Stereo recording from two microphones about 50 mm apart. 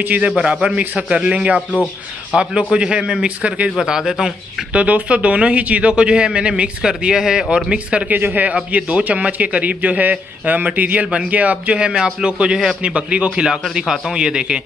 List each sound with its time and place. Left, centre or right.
0.0 s a man's voice: right
0.4 s a man's voice: centre
3.8 s a man's voice: centre
4.7 s a man's voice: right
8.1 s a man's voice: right; by 14.6 s centre